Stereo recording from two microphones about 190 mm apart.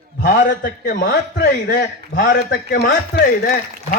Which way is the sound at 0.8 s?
45° left (ahead or behind).